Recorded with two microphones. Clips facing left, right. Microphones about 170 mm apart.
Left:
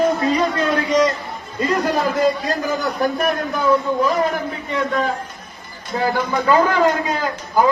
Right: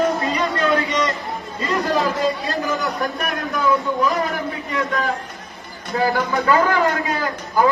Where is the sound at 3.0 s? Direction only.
35° left (ahead or behind).